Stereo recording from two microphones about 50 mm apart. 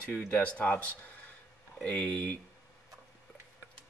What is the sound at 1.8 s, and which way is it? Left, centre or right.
Speech, centre.